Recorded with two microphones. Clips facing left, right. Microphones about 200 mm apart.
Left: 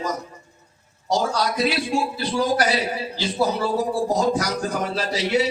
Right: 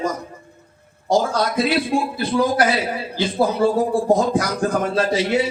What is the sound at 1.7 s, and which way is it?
A man's voice, 55° right (ahead or behind).